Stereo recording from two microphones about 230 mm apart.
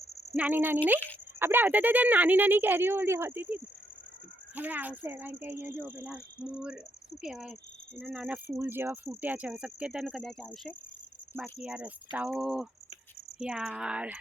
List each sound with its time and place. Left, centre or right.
0.3 s speech: centre
7.9 s cricket: centre